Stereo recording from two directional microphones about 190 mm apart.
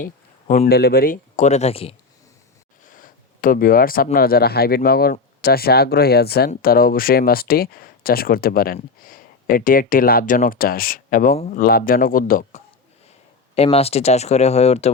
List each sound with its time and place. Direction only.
0.0 s a sound: 45° left (ahead or behind)
0.7 s speech: 55° left (ahead or behind); by 2.0 s 30° left (ahead or behind)
2.8 s speech: 45° left (ahead or behind)
13.6 s speech: 30° left (ahead or behind)